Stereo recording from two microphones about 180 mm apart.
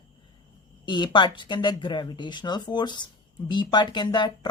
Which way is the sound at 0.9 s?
25° left (ahead or behind).